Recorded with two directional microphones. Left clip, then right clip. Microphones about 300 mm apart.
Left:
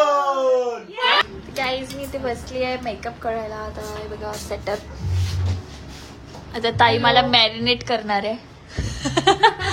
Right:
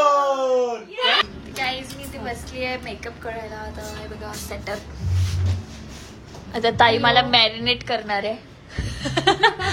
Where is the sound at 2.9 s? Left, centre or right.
Centre.